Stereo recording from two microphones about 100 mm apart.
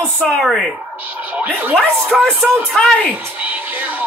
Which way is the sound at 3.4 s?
15° right (ahead or behind).